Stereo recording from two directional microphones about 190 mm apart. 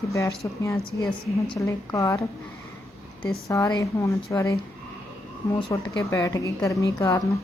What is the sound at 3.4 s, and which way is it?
Speech, 15° left (ahead or behind).